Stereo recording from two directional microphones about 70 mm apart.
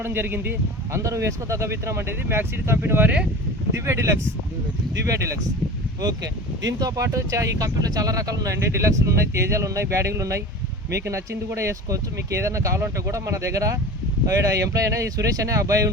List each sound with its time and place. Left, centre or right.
0.0 s speech: right
0.9 s speech: right
6.7 s speech: right